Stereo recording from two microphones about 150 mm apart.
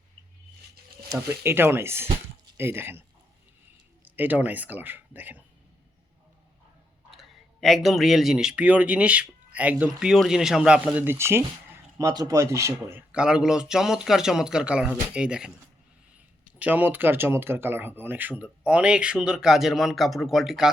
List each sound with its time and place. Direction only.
1.1 s speech: 20° right (ahead or behind)
4.0 s speech: 10° right (ahead or behind)
7.1 s speech: centre (ahead or behind)
16.6 s speech: 10° right (ahead or behind)